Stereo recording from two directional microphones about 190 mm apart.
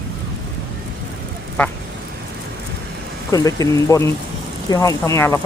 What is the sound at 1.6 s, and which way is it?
Speech, 5° left (ahead or behind).